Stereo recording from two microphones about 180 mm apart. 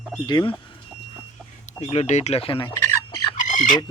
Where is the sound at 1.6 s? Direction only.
35° left (ahead or behind).